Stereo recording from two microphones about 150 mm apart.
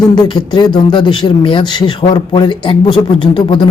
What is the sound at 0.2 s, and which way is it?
A man's voice, 30° left (ahead or behind).